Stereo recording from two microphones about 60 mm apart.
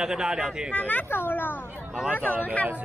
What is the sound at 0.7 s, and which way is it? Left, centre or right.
Speech, left.